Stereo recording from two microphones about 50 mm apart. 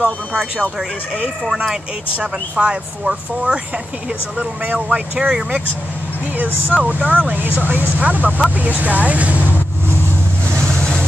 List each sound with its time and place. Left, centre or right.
0.3 s speech: right
2.1 s speech: right
4.9 s speech: right
6.3 s speech: right
10.8 s vehicle: centre